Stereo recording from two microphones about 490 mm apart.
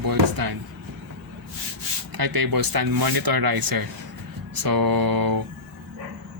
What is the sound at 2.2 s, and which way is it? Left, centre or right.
Speech, right.